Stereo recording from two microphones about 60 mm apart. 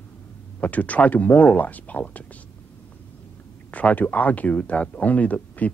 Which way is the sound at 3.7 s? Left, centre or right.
Left.